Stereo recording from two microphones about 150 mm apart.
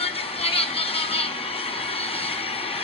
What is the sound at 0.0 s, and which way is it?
Vehicle, 40° left (ahead or behind).